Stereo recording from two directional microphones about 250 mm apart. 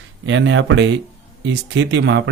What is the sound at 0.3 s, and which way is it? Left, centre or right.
Speech, right.